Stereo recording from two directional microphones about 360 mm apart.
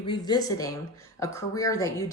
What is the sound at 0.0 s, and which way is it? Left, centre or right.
Speech, centre.